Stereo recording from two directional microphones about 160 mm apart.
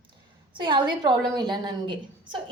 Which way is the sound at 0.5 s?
30° right (ahead or behind).